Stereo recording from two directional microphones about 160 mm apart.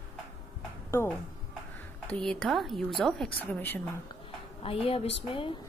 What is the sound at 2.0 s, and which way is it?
A woman's voice, 5° left (ahead or behind).